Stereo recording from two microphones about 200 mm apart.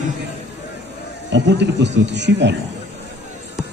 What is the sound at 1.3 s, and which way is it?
Speech, 60° right (ahead or behind).